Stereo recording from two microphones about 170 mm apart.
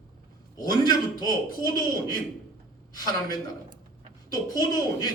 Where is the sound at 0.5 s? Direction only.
25° left (ahead or behind).